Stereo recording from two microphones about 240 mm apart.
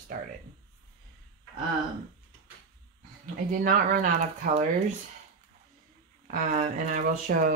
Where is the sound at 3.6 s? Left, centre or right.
Right.